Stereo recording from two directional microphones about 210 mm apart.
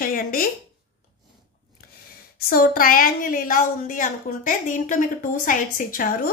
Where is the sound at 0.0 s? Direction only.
40° left (ahead or behind).